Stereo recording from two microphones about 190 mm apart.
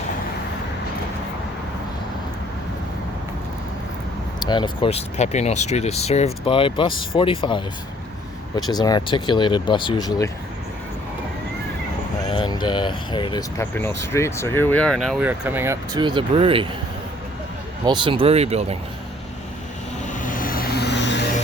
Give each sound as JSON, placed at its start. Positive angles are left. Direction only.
{"t": 4.4, "sound": "speech", "side_deg": 25}
{"t": 12.3, "sound": "speech", "side_deg": 25}
{"t": 13.7, "sound": "speech", "side_deg": 15}
{"t": 15.3, "sound": "speech", "side_deg": -10}
{"t": 17.8, "sound": "speech", "side_deg": -25}
{"t": 20.1, "sound": "vehicle", "side_deg": 45}